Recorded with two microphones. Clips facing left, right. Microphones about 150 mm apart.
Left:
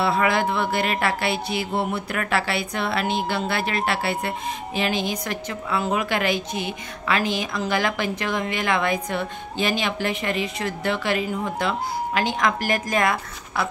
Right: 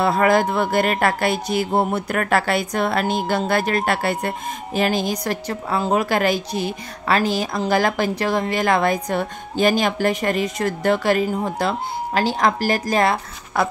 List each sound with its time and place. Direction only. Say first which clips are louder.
0.0 s speech: right 4 dB; 45° right (ahead or behind)
13.5 s speech: right 5 dB; 50° right (ahead or behind)